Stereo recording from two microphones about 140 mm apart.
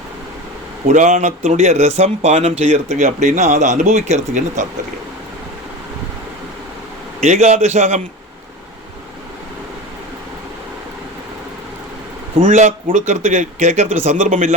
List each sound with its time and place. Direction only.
0.9 s speech: 55° right (ahead or behind)
7.2 s a man's voice: 55° right (ahead or behind)
12.4 s speech: 65° right (ahead or behind)